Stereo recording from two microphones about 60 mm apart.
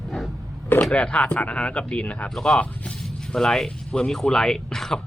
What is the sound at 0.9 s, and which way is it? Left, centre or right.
Speech, centre.